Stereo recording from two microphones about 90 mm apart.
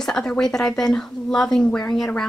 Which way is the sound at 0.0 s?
10° left (ahead or behind).